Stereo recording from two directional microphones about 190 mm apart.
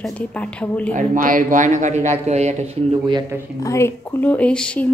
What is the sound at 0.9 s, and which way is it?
A man's voice, 45° right (ahead or behind).